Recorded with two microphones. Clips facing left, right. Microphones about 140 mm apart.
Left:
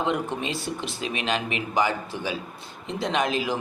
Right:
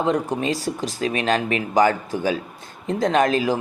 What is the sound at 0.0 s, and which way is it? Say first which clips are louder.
A man's voice: right 5 dB; 40° right (ahead or behind).